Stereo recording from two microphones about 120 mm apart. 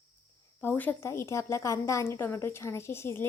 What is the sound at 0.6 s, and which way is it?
Speech, 15° left (ahead or behind).